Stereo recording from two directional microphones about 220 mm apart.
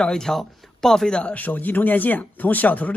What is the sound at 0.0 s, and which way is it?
Speech, centre (ahead or behind).